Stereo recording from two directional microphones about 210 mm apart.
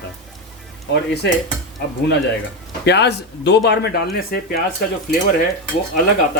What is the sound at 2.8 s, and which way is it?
Speech, 55° left (ahead or behind).